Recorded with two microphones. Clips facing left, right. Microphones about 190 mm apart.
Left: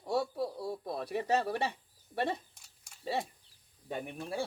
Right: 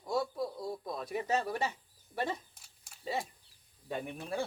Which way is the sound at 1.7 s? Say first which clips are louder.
Left 2 dB; 60° left (ahead or behind).